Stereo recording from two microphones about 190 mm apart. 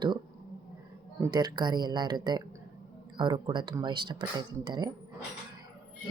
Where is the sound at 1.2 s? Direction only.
20° right (ahead or behind).